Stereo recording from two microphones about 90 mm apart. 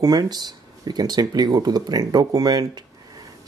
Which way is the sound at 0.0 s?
45° right (ahead or behind).